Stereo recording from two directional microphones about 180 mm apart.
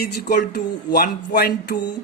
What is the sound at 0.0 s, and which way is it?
Speech, 65° left (ahead or behind).